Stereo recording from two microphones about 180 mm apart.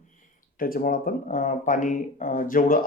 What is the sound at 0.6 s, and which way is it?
Speech, 50° left (ahead or behind).